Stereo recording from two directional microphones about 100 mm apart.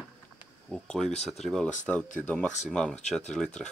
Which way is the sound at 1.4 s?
5° left (ahead or behind).